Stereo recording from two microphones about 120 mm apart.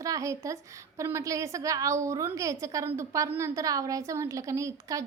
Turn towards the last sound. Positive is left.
turn(degrees=-25)  # may be behind; listen again after turning